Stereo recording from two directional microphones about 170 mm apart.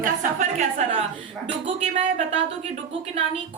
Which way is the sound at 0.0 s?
45° right (ahead or behind).